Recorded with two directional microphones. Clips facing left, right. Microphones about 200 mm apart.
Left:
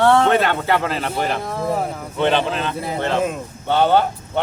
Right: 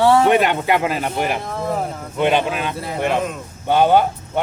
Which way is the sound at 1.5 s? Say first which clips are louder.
Left 1 dB; 5° left (ahead or behind).